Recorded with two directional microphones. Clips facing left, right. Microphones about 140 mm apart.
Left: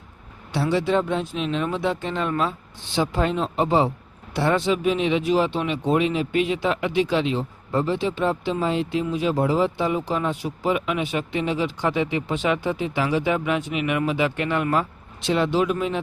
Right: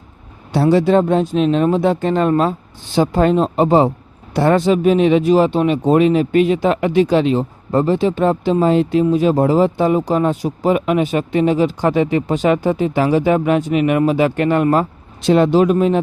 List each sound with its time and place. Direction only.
0.5 s speech: 40° right (ahead or behind)